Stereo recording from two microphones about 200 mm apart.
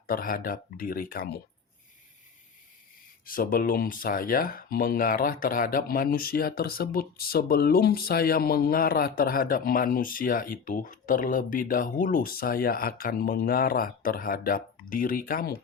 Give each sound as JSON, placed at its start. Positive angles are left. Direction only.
{"t": 0.1, "sound": "speech", "side_deg": 45}
{"t": 3.2, "sound": "speech", "side_deg": 45}